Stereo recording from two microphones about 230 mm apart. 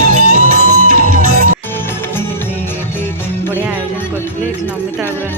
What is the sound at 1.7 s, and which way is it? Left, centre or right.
Music, centre.